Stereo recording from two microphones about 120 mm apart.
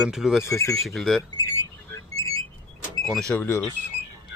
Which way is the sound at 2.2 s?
30° left (ahead or behind).